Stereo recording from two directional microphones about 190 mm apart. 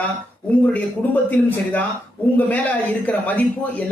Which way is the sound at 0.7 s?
10° left (ahead or behind).